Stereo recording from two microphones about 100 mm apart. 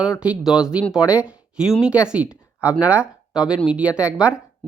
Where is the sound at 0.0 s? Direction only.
10° right (ahead or behind).